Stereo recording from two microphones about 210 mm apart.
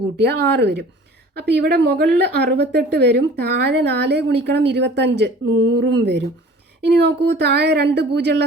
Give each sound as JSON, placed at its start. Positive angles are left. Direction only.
{"t": 0.2, "sound": "a woman's voice", "side_deg": -50}